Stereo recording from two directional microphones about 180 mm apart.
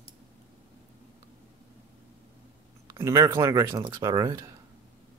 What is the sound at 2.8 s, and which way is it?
Speech, 15° right (ahead or behind).